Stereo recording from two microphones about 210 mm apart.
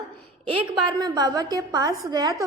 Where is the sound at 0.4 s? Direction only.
20° right (ahead or behind).